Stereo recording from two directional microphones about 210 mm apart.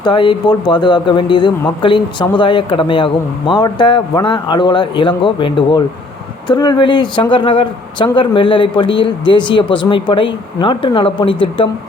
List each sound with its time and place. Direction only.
0.0 s speech: 25° left (ahead or behind)